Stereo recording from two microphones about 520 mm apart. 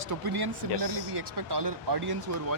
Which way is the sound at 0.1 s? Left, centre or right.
Right.